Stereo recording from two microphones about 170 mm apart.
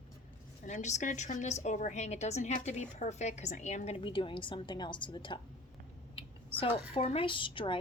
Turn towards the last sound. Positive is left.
turn(degrees=30)  # may be behind; listen again after turning